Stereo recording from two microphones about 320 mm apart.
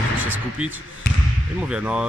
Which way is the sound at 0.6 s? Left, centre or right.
Centre.